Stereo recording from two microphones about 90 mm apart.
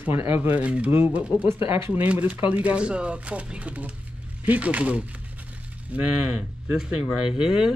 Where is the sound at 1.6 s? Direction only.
80° left.